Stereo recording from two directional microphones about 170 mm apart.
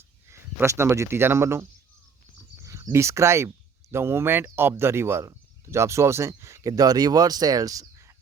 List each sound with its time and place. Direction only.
0.3 s speech: 15° right (ahead or behind)
2.6 s speech: 20° right (ahead or behind)